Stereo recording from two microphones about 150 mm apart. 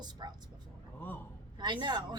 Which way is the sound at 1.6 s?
30° right (ahead or behind).